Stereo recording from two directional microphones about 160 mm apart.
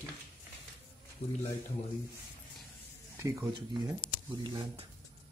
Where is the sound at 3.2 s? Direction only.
20° right (ahead or behind).